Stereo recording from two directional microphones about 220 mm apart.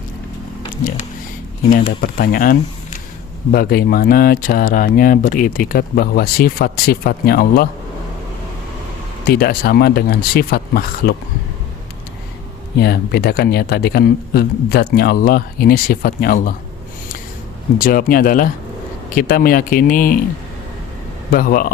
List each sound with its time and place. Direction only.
2.0 s speech: 40° left (ahead or behind)
9.3 s speech: 45° left (ahead or behind)
12.8 s speech: 45° left (ahead or behind)
17.7 s speech: 40° left (ahead or behind)
21.3 s speech: 40° left (ahead or behind)